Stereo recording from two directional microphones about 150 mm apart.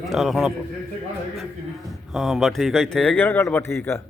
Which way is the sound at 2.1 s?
Centre (ahead or behind).